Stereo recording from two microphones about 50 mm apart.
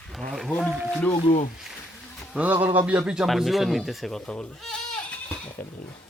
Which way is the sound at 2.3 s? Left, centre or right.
Right.